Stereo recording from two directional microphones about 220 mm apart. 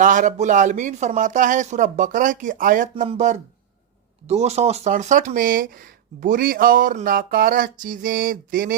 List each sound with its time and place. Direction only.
0.0 s speech: 35° right (ahead or behind)